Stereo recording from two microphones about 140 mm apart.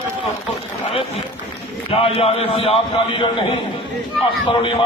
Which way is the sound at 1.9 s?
45° left (ahead or behind).